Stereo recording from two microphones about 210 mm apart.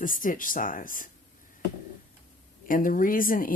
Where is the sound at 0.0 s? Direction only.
40° left (ahead or behind).